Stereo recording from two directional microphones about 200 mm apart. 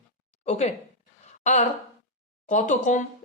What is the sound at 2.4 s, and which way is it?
Speech, 40° left (ahead or behind).